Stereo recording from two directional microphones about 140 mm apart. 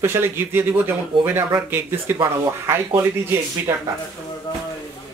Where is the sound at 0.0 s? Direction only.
15° right (ahead or behind).